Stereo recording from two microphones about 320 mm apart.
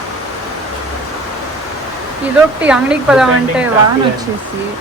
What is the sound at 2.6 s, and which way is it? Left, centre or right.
Speech, centre.